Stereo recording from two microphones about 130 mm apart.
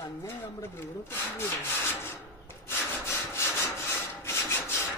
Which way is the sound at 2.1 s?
20° left (ahead or behind).